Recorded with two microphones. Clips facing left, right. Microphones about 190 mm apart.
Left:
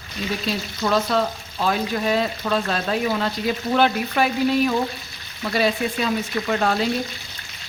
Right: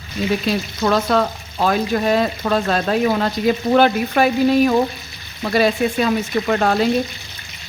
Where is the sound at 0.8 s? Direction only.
55° right (ahead or behind).